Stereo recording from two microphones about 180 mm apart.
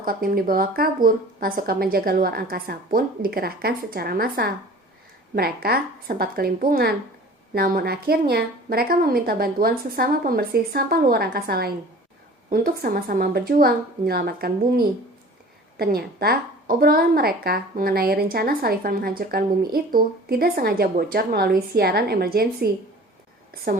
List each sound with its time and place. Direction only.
0.0 s a woman's voice: 50° right (ahead or behind)